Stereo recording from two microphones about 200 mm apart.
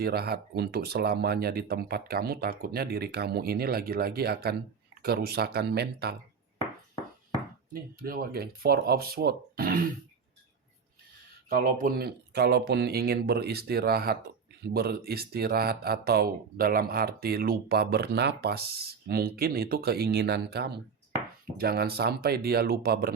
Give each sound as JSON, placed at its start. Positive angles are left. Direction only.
{"t": 0.0, "sound": "speech", "side_deg": -50}
{"t": 7.7, "sound": "speech", "side_deg": -45}
{"t": 11.4, "sound": "speech", "side_deg": -45}